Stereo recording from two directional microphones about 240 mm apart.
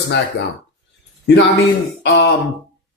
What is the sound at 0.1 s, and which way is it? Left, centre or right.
Speech, left.